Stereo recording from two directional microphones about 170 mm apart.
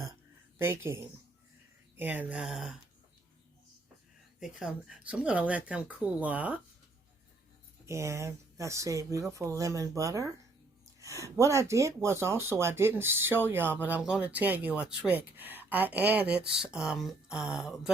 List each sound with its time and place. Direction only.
0.6 s speech: 15° right (ahead or behind)
4.4 s speech: centre (ahead or behind)
7.9 s speech: 15° right (ahead or behind)